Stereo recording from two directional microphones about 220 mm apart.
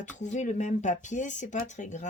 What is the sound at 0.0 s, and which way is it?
Speech, 35° left (ahead or behind).